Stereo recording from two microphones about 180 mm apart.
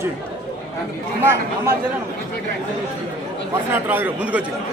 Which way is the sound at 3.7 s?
10° right (ahead or behind).